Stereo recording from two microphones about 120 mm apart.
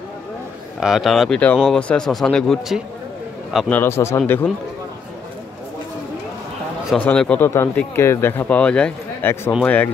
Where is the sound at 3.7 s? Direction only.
20° left (ahead or behind).